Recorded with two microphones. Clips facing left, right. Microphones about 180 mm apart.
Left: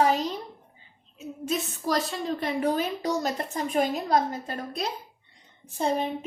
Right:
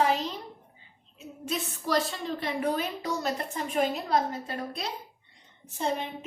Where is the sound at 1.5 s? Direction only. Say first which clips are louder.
Left 2 dB; 40° left (ahead or behind).